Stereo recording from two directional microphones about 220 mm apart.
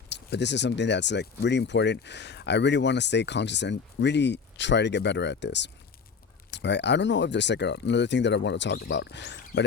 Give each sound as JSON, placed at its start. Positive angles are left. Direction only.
{"t": 0.1, "sound": "speech", "side_deg": 50}